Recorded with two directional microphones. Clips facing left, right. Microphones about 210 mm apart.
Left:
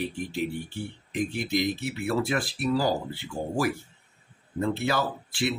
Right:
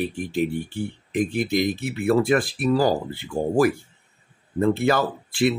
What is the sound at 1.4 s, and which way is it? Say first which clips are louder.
Speech: right 5 dB; 55° right (ahead or behind).